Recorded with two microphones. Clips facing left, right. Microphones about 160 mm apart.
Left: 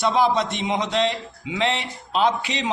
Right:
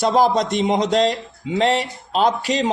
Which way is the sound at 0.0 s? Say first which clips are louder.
Right 3 dB; 40° right (ahead or behind).